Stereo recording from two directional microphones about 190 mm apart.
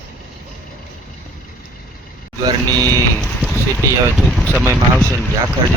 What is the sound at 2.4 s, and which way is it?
Speech, 20° right (ahead or behind).